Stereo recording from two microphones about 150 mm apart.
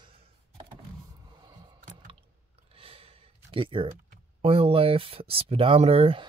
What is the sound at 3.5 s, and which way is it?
Speech, 35° right (ahead or behind).